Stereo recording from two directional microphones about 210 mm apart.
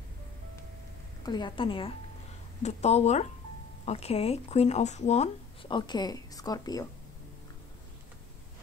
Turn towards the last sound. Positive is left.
turn(degrees=20)  # may be behind; listen again after turning